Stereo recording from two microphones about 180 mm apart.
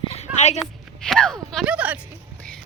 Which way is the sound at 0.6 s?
Centre (ahead or behind).